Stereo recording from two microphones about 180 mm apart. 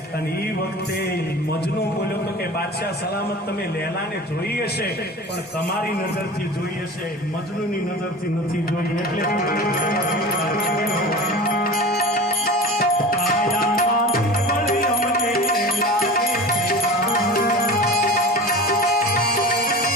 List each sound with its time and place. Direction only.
9.1 s music: 55° left (ahead or behind)
17.1 s music: 55° left (ahead or behind)